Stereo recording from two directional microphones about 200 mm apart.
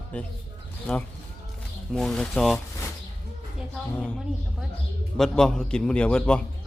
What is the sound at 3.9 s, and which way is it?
A man's voice, 5° left (ahead or behind).